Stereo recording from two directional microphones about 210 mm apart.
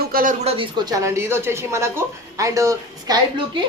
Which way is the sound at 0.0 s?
45° right (ahead or behind).